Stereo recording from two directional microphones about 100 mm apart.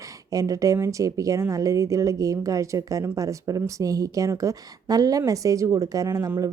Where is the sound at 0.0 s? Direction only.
35° right (ahead or behind).